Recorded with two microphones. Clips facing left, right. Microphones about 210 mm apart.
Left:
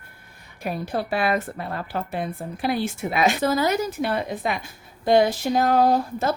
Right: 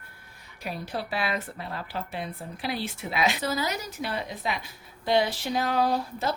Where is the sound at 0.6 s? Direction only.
50° left (ahead or behind).